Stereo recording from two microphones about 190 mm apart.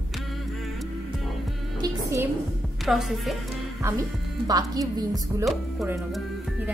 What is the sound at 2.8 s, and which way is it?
Speech, centre (ahead or behind).